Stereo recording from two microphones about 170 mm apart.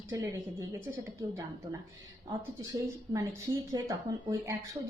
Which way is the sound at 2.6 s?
20° right (ahead or behind).